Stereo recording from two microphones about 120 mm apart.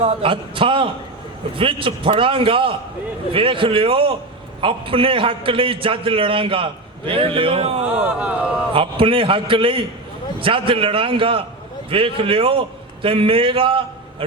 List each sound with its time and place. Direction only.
0.0 s a man's voice: 50° right (ahead or behind)
8.0 s speech: 10° right (ahead or behind)
8.7 s a man's voice: 50° right (ahead or behind)